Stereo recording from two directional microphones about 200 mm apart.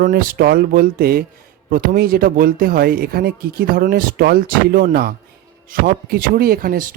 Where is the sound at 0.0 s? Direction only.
45° right (ahead or behind).